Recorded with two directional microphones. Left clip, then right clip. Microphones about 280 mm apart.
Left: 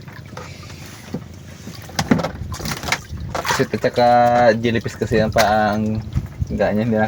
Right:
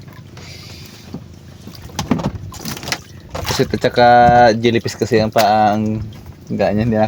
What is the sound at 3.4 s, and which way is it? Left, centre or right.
Speech, right.